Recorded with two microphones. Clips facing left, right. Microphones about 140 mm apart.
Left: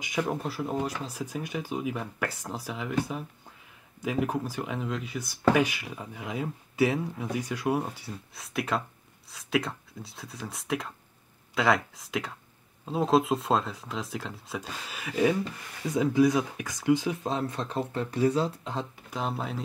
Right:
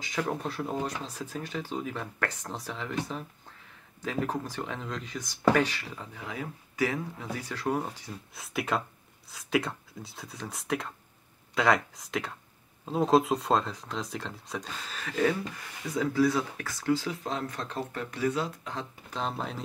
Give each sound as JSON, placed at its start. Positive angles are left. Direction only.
{"t": 0.0, "sound": "speech", "side_deg": 10}
{"t": 19.0, "sound": "speech", "side_deg": 5}